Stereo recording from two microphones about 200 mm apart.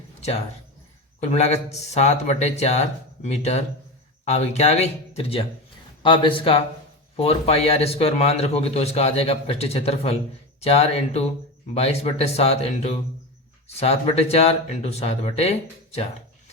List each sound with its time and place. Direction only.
0.2 s speech: 30° left (ahead or behind)